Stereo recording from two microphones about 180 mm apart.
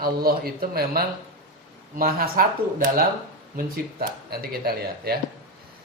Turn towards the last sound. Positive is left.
turn(degrees=-60)  # may be behind; listen again after turning